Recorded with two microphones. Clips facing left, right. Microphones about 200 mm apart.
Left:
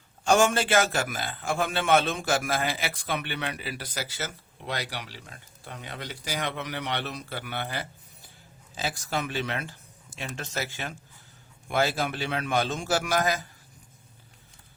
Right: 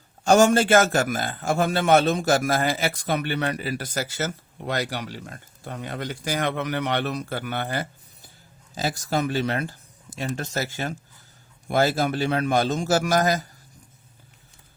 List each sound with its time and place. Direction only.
0.3 s a man's voice: 40° right (ahead or behind)